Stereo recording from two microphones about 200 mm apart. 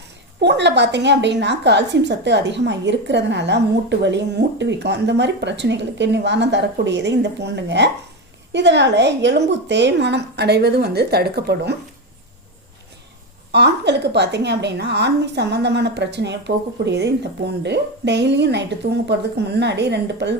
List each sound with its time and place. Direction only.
0.4 s a woman's voice: 60° right (ahead or behind)
13.5 s a woman's voice: 55° right (ahead or behind)